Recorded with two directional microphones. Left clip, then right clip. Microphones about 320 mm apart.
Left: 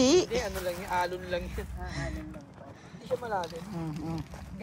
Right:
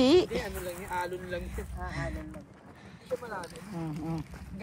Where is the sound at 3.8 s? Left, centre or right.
Centre.